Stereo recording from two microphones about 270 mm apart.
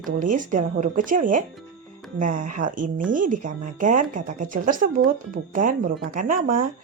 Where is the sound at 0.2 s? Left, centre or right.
Right.